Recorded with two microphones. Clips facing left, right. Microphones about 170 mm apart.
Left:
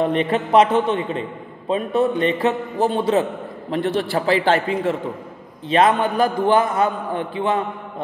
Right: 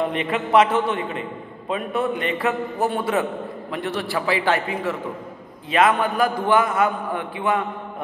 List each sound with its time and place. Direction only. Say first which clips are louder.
0.1 s a man's voice: left 3 dB; 35° left (ahead or behind)
0.7 s a man's voice: left 3 dB; 25° left (ahead or behind)